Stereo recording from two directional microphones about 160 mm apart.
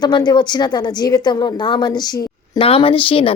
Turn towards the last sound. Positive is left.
turn(degrees=35)  # may be behind; listen again after turning